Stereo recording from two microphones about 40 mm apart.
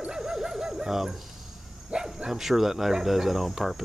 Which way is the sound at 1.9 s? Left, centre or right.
Right.